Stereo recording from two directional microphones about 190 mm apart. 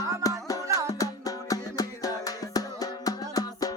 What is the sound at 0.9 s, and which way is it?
Music, 20° left (ahead or behind).